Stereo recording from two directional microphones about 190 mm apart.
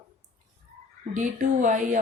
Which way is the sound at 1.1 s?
40° right (ahead or behind).